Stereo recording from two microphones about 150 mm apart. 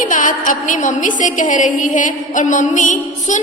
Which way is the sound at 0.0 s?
60° left (ahead or behind).